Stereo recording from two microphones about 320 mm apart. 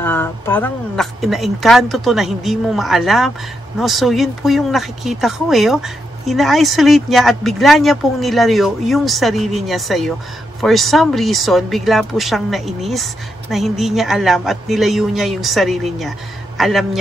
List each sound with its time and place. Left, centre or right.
0.0 s speech: centre